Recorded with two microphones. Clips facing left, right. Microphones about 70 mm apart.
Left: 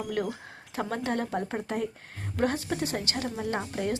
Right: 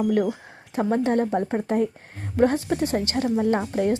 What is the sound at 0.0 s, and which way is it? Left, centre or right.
Speech, right.